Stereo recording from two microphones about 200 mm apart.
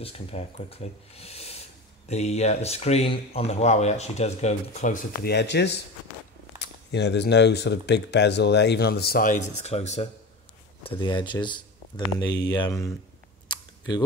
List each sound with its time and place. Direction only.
0.0 s speech: 30° left (ahead or behind)
5.3 s speech: 60° left (ahead or behind); by 12.9 s 20° left (ahead or behind)
13.5 s camera: 20° left (ahead or behind)